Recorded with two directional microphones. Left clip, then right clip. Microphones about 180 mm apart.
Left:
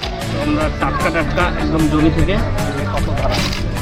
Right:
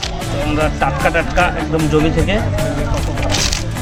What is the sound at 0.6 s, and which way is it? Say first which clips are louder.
Speech: right 5 dB; 35° right (ahead or behind).